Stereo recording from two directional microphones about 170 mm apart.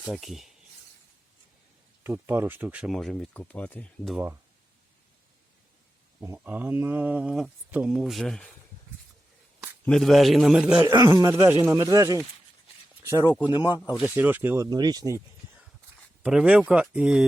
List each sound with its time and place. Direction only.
0.1 s speech: centre (ahead or behind)
2.0 s speech: 15° right (ahead or behind); by 4.2 s 5° left (ahead or behind)
6.2 s speech: 10° right (ahead or behind)
9.8 s speech: centre (ahead or behind)
10.8 s speech: 20° right (ahead or behind)
13.5 s speech: 25° left (ahead or behind)
13.9 s speech: 10° right (ahead or behind)
16.2 s speech: 5° right (ahead or behind)